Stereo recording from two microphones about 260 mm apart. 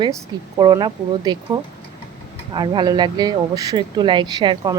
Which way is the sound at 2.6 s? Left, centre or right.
Centre.